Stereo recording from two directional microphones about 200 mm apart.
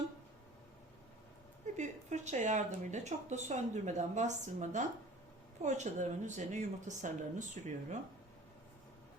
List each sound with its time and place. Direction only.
1.7 s speech: 35° right (ahead or behind)